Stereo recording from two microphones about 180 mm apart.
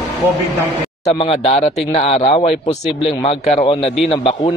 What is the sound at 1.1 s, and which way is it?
Speech, 30° left (ahead or behind).